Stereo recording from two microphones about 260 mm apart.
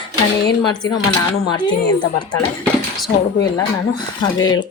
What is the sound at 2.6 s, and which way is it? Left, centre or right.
Speech, centre.